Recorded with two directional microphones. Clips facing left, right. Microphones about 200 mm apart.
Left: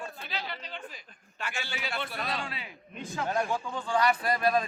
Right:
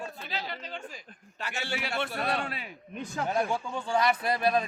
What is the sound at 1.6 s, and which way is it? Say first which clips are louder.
A man's voice: right 5 dB; 65° right (ahead or behind).